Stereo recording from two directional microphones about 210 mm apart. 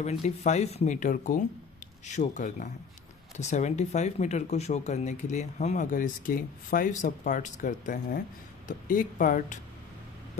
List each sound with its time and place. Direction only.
0.0 s speech: 30° left (ahead or behind)